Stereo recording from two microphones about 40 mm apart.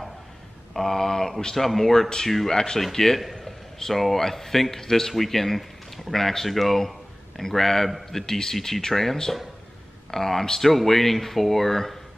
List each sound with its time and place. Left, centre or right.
0.7 s a man's voice: centre